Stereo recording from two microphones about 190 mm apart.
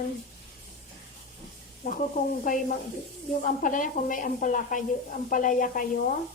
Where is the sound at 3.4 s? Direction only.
45° left (ahead or behind).